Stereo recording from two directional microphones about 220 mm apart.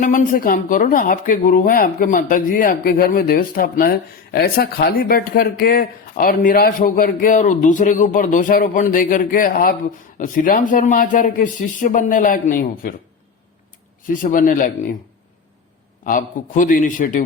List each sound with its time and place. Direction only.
0.0 s speech: 35° left (ahead or behind)
14.1 s speech: 40° left (ahead or behind)
16.0 s speech: 35° left (ahead or behind)